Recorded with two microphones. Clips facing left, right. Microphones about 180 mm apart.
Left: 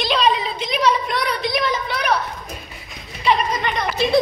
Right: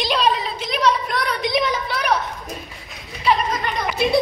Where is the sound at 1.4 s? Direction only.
15° right (ahead or behind).